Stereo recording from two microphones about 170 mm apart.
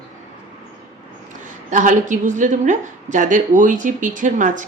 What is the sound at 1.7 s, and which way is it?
A woman's voice, 50° right (ahead or behind).